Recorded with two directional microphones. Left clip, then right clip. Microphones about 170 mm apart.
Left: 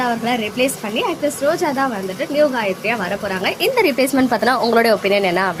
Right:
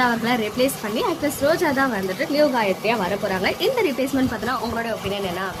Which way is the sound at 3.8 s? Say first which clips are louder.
Left 6 dB; 25° left (ahead or behind).